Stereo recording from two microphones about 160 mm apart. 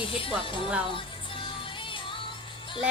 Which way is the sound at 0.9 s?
30° left (ahead or behind).